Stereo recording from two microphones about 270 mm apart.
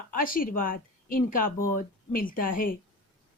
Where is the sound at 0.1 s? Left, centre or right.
Left.